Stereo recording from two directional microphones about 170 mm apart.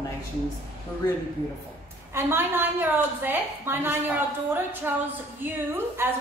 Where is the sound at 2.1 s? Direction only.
15° right (ahead or behind).